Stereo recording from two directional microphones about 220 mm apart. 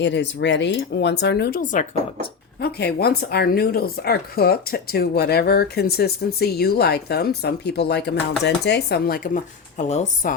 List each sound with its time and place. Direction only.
0.0 s speech: 50° left (ahead or behind); by 10.3 s 30° left (ahead or behind)